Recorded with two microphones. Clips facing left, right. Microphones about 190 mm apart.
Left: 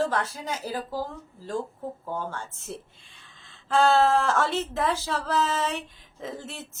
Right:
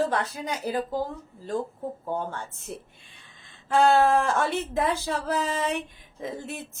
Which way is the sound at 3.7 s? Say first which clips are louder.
Right 1 dB; 15° right (ahead or behind).